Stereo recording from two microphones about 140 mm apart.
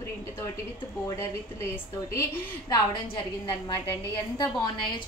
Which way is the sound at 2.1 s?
20° left (ahead or behind).